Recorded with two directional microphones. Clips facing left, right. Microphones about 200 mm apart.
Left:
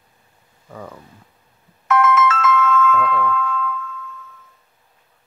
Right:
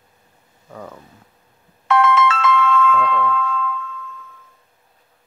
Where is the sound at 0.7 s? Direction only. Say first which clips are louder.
Even; centre (ahead or behind).